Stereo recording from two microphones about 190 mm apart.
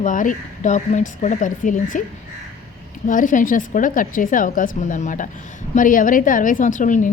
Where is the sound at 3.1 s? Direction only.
45° left (ahead or behind).